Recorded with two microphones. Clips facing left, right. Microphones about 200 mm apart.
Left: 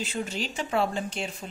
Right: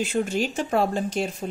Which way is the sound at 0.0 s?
50° right (ahead or behind).